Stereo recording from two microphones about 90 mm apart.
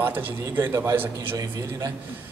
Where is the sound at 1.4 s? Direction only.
40° right (ahead or behind).